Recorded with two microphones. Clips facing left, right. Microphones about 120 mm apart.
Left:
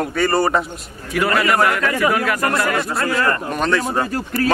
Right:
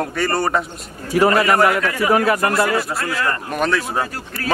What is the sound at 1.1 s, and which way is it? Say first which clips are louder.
Speech: right 3 dB; 35° right (ahead or behind).